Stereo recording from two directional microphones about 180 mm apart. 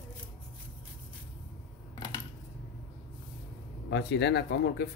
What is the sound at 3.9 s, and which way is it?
Speech, 70° left (ahead or behind).